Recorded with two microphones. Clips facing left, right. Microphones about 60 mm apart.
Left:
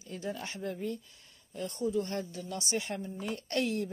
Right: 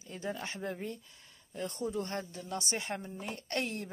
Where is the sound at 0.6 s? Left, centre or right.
Right.